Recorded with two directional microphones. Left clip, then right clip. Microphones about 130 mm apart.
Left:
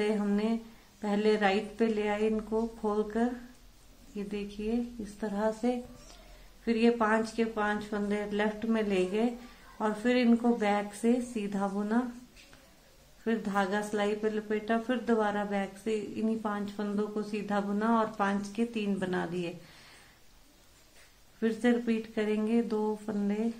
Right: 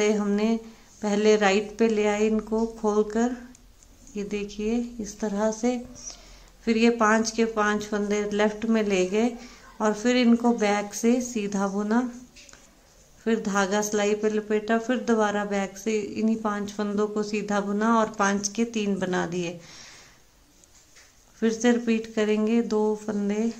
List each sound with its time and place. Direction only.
0.0 s speech: 30° right (ahead or behind)
13.2 s speech: 30° right (ahead or behind)
21.4 s speech: 25° right (ahead or behind)